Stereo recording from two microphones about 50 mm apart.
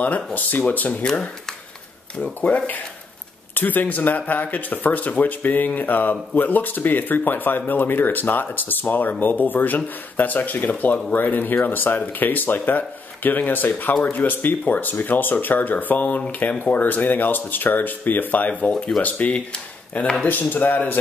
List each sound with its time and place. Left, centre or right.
0.0 s speech: left
2.4 s speech: left
20.2 s speech: left